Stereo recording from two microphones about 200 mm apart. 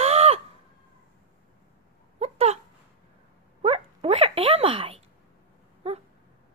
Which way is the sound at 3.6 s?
30° right (ahead or behind).